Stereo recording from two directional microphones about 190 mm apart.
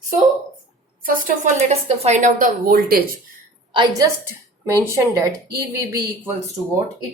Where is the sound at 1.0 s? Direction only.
45° right (ahead or behind).